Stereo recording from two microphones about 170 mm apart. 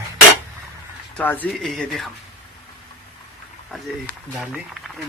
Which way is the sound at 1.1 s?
10° left (ahead or behind).